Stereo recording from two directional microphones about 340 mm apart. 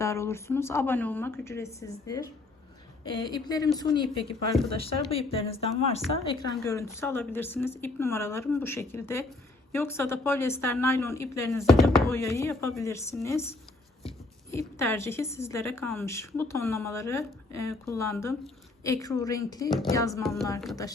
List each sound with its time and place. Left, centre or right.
0.0 s a woman's voice: centre
14.5 s a woman's voice: centre